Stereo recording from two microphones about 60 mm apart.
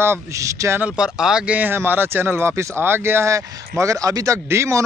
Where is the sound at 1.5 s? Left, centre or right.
Right.